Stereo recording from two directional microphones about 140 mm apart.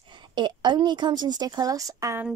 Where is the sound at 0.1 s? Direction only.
35° right (ahead or behind).